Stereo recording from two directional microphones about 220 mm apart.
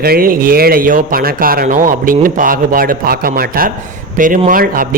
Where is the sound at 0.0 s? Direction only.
40° right (ahead or behind).